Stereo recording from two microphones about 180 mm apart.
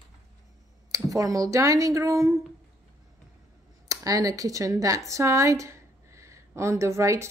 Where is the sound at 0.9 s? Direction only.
20° right (ahead or behind).